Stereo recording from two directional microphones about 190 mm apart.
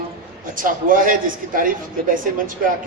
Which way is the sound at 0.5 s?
45° right (ahead or behind).